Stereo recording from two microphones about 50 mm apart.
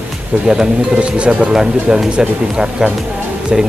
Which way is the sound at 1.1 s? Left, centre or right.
Right.